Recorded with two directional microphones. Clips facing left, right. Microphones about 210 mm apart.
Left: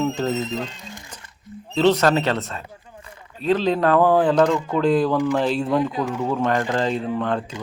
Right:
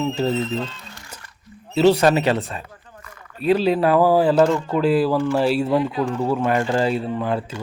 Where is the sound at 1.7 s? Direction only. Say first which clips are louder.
Right 2 dB; 10° right (ahead or behind).